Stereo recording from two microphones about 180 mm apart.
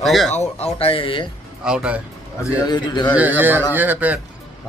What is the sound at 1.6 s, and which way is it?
Speech, 5° right (ahead or behind).